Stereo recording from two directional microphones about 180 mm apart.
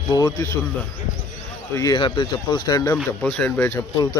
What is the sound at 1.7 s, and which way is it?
Speech, 25° left (ahead or behind).